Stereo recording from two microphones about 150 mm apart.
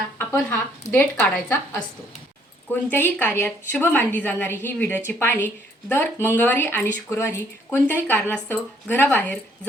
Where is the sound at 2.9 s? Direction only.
10° left (ahead or behind).